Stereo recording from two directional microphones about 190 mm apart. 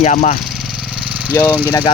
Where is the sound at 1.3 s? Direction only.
10° left (ahead or behind).